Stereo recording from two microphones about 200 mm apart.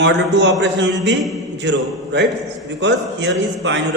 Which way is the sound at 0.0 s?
60° right (ahead or behind).